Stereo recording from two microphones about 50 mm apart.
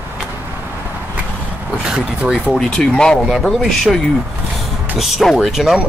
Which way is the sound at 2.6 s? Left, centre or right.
Centre.